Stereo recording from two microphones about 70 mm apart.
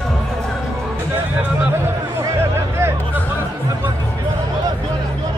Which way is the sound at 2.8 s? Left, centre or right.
Right.